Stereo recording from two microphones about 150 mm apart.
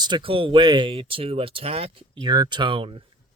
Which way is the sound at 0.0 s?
30° right (ahead or behind).